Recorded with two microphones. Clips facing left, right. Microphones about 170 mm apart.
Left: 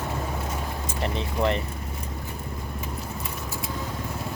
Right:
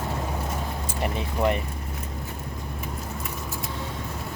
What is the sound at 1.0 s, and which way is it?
Speech, 10° right (ahead or behind).